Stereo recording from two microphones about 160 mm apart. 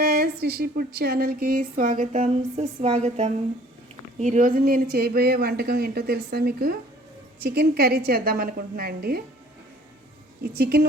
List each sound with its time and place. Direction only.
0.0 s a sound: 75° right (ahead or behind); by 3.3 s 45° right (ahead or behind)
4.2 s speech: 50° right (ahead or behind); by 9.2 s 75° right (ahead or behind)
10.4 s a woman's voice: 85° right